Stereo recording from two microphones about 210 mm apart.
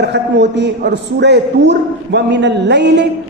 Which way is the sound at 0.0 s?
55° right (ahead or behind).